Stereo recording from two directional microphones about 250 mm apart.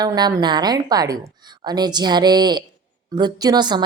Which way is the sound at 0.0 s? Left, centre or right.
Centre.